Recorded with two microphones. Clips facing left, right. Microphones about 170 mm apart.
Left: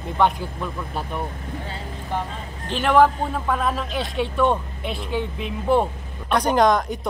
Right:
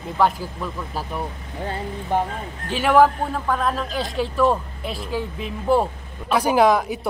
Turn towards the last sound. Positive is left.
turn(degrees=-5)  # may be behind; listen again after turning